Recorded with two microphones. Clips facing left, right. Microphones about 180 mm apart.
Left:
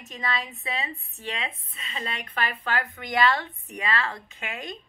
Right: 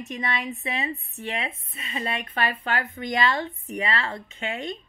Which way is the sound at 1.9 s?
25° right (ahead or behind).